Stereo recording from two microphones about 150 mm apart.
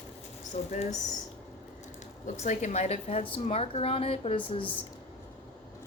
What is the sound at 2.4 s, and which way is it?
A woman's voice, 50° left (ahead or behind).